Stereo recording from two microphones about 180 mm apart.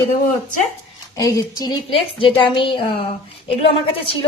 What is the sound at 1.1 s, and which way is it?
A woman's voice, 20° left (ahead or behind).